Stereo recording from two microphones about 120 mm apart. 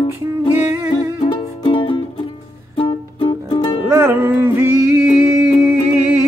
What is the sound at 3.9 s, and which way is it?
Music, 20° right (ahead or behind).